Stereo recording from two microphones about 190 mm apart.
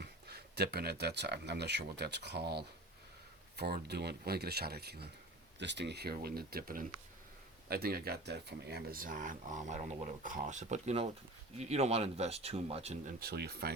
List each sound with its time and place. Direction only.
0.0 s speech: 60° right (ahead or behind); by 13.0 s 35° right (ahead or behind)
13.1 s speech: 55° right (ahead or behind)